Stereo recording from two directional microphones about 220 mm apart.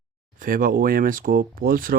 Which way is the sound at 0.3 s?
40° right (ahead or behind).